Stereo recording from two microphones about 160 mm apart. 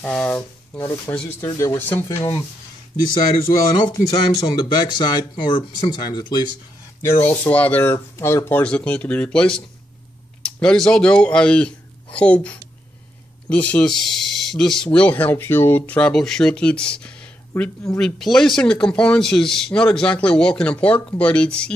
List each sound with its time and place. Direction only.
0.0 s speech: 10° left (ahead or behind)
4.1 s speech: 25° left (ahead or behind)
7.0 s speech: 15° left (ahead or behind)